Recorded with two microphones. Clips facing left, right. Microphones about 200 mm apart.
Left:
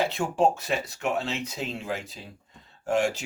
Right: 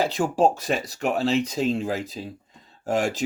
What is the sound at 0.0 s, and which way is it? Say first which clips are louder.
Speech: right 3 dB; 35° right (ahead or behind).